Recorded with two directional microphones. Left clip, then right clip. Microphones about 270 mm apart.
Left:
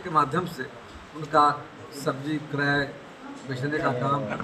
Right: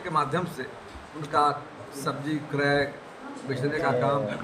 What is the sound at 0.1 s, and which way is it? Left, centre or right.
Speech, centre.